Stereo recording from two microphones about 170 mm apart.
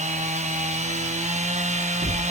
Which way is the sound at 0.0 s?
45° right (ahead or behind).